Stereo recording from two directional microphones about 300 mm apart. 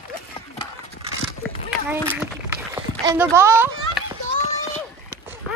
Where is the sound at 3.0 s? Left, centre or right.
Centre.